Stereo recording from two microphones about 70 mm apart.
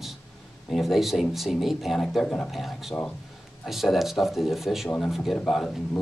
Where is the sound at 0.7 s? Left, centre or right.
Centre.